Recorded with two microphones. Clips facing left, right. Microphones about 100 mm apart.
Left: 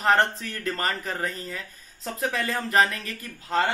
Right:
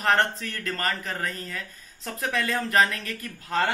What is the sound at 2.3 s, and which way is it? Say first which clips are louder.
Speech: right 1 dB; 15° left (ahead or behind).